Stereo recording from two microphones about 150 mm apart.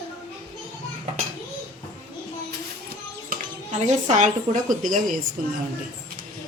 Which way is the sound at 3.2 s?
50° right (ahead or behind).